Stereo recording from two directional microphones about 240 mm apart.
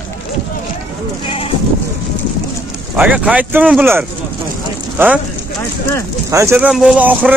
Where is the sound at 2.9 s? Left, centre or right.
Centre.